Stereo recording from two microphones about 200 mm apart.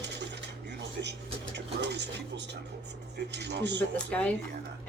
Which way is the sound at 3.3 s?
60° right (ahead or behind).